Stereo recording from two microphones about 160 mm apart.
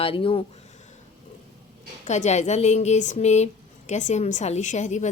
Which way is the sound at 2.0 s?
45° left (ahead or behind).